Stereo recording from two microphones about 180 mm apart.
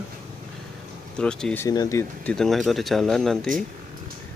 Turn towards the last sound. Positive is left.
turn(degrees=0)  # may be behind; listen again after turning